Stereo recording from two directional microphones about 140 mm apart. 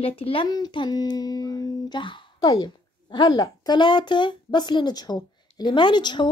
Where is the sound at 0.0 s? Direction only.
40° left (ahead or behind).